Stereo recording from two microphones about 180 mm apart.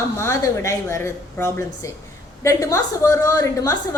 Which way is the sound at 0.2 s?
15° left (ahead or behind).